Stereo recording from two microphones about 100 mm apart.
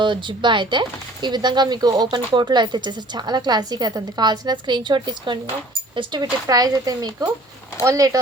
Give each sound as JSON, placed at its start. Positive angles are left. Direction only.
{"t": 0.0, "sound": "speech", "side_deg": -55}